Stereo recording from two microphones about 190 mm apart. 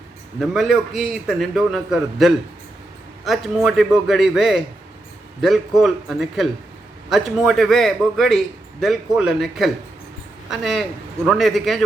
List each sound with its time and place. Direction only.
0.3 s a man's voice: centre (ahead or behind)